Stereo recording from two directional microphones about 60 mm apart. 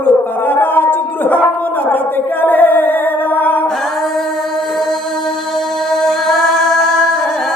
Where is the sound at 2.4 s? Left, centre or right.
Left.